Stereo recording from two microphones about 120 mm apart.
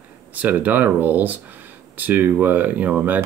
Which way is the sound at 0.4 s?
15° right (ahead or behind).